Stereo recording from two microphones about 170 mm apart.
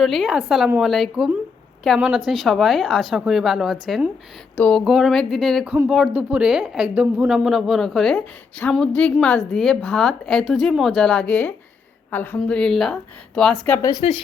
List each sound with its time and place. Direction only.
0.0 s speech: centre (ahead or behind)
14.0 s speech: 35° left (ahead or behind)